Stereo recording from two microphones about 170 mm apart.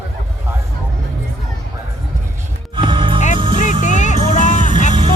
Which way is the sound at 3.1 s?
45° left (ahead or behind).